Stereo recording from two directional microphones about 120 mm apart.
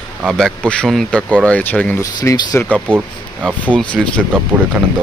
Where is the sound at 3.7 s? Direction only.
10° left (ahead or behind).